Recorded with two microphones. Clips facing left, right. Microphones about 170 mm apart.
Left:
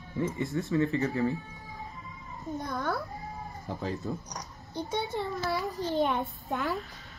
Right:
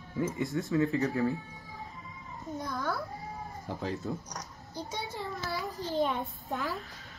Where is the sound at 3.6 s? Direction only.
Centre (ahead or behind).